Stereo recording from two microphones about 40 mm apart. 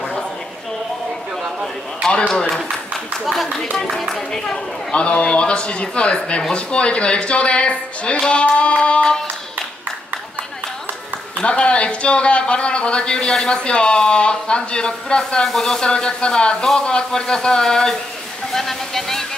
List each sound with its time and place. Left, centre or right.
2.0 s a man's voice: left
3.7 s a man's voice: centre
4.9 s a man's voice: left
11.4 s a man's voice: left
18.5 s a sound: centre